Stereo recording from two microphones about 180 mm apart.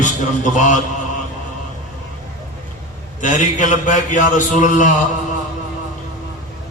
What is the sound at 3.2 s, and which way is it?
A man's voice, 45° left (ahead or behind).